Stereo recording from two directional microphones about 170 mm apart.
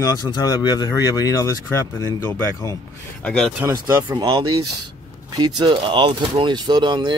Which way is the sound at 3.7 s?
20° right (ahead or behind).